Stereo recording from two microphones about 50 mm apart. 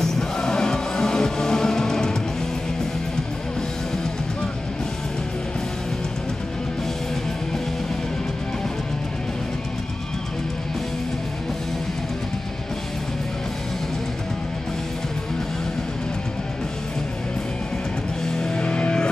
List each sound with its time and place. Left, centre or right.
0.0 s music: centre
18.3 s music: centre